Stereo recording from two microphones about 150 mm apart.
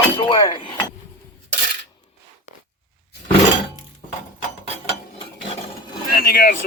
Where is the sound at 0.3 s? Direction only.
30° left (ahead or behind).